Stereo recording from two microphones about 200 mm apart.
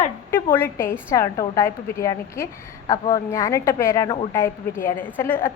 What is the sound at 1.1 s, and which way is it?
A woman's voice, 15° left (ahead or behind).